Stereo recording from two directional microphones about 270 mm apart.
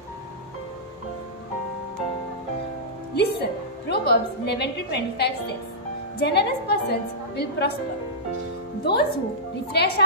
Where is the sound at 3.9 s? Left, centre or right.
Left.